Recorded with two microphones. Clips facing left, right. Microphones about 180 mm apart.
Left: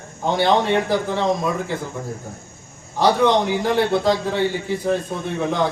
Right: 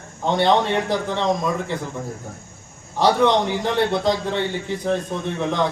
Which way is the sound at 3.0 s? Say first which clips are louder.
Left 1 dB; centre (ahead or behind).